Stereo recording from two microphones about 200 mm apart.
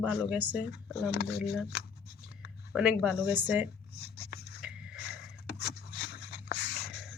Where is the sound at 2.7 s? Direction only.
5° right (ahead or behind).